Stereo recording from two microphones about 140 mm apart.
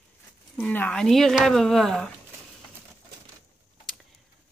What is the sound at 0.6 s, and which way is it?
Speech, 10° left (ahead or behind).